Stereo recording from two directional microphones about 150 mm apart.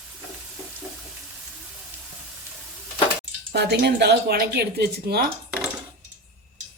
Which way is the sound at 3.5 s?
90° right.